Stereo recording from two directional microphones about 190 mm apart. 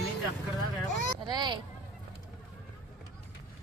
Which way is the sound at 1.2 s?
25° right (ahead or behind).